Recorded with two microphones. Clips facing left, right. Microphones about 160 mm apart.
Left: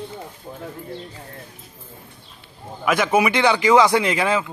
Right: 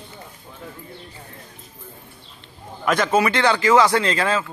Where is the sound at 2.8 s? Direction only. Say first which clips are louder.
Even; 10° left (ahead or behind).